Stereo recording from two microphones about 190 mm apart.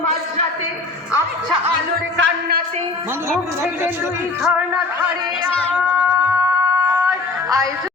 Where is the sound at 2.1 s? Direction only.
65° right (ahead or behind).